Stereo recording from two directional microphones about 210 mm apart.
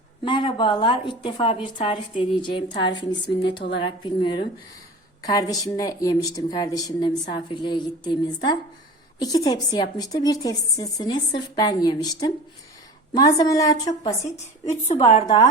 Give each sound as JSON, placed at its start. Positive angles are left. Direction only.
{"t": 0.3, "sound": "a woman's voice", "side_deg": 20}
{"t": 14.8, "sound": "a woman's voice", "side_deg": 30}